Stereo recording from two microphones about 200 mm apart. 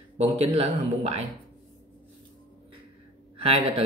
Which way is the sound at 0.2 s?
30° right (ahead or behind).